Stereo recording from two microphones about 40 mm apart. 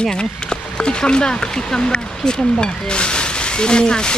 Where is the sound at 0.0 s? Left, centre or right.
Left.